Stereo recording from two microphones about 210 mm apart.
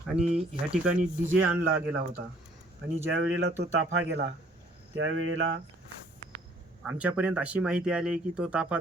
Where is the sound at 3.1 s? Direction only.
55° right (ahead or behind).